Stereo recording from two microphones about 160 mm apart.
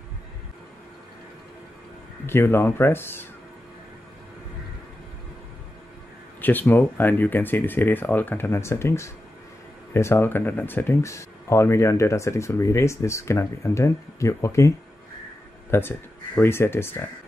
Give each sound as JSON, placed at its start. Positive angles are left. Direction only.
{"t": 2.2, "sound": "speech", "side_deg": 15}
{"t": 6.4, "sound": "speech", "side_deg": 10}
{"t": 15.7, "sound": "speech", "side_deg": 15}